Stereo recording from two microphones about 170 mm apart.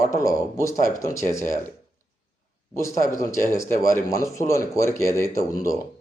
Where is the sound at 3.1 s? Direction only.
15° left (ahead or behind).